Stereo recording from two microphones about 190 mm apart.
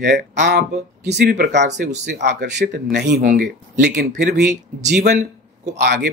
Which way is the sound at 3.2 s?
45° right (ahead or behind).